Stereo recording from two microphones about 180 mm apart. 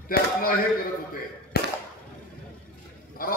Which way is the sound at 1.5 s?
60° left (ahead or behind).